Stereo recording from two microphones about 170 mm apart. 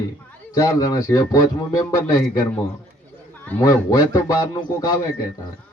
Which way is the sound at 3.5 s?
15° left (ahead or behind).